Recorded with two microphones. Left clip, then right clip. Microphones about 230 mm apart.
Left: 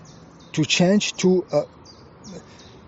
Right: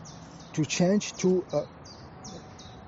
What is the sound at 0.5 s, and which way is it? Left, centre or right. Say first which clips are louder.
Speech: left 7 dB; left.